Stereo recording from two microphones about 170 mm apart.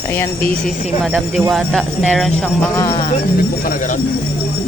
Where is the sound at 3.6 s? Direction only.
50° left (ahead or behind).